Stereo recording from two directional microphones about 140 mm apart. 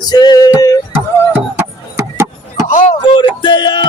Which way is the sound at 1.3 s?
15° right (ahead or behind).